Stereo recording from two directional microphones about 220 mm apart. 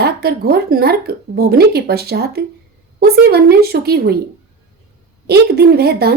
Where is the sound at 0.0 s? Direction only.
45° right (ahead or behind).